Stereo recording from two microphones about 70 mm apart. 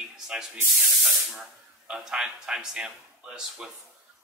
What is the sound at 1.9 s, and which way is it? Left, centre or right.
A man's voice, centre.